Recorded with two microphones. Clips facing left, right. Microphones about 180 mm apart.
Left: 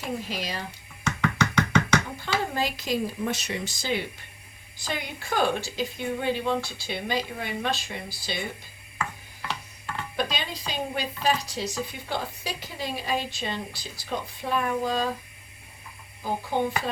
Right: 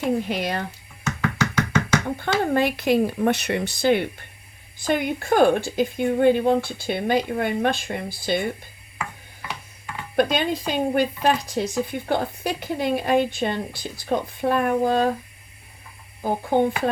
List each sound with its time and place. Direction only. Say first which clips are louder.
0.3 s a woman's voice: right 7 dB; 60° right (ahead or behind)
1.0 s knock: right 1 dB; 5° right (ahead or behind)
2.1 s a woman's voice: right 7 dB; 55° right (ahead or behind)
10.2 s a woman's voice: right 11 dB; 55° right (ahead or behind)
16.2 s a woman's voice: right 6 dB; 55° right (ahead or behind)